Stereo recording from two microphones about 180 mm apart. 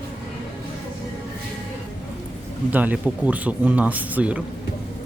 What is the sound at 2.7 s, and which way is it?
Speech, 10° right (ahead or behind).